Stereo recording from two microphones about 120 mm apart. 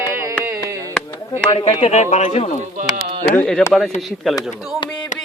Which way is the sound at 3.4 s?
10° left (ahead or behind).